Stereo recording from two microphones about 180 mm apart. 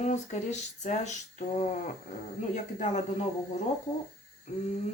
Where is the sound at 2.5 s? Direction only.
45° left (ahead or behind).